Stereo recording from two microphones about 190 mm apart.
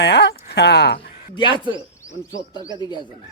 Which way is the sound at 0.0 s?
65° left (ahead or behind).